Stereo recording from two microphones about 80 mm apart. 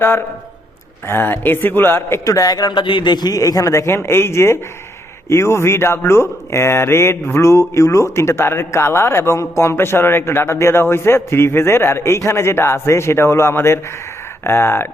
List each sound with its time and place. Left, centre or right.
0.0 s a man's voice: left
2.2 s a man's voice: left